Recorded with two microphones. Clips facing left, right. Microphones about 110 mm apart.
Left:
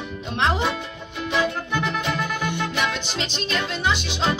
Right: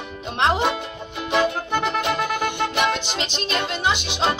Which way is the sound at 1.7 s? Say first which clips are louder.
Right 3 dB; 55° right (ahead or behind).